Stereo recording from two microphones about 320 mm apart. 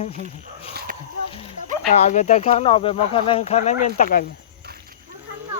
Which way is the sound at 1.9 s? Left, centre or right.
Left.